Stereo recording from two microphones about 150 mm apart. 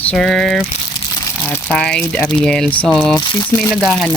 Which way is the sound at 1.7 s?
5° left (ahead or behind).